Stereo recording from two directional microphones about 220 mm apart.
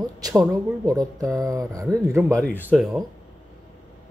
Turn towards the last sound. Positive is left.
turn(degrees=0)  # may be behind; listen again after turning